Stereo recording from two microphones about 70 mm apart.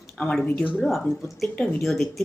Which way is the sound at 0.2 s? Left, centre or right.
Centre.